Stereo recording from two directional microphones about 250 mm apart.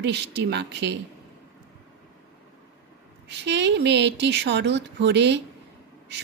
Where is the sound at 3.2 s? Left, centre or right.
Right.